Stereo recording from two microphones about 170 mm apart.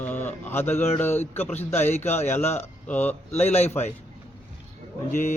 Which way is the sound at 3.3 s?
40° left (ahead or behind).